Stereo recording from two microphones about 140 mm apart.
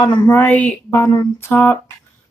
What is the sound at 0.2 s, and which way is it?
A woman's voice, 10° left (ahead or behind).